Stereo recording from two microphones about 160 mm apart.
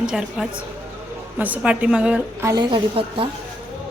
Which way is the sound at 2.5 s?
25° right (ahead or behind).